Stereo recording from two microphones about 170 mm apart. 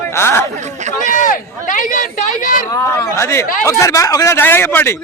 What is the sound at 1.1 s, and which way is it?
Speech, 50° left (ahead or behind).